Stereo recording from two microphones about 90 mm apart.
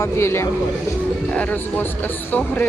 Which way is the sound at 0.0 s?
30° left (ahead or behind).